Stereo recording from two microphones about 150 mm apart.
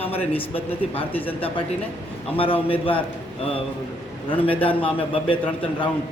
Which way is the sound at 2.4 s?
35° left (ahead or behind).